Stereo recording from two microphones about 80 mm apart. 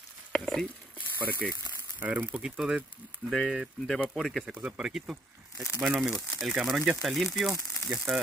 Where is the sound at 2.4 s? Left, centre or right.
Centre.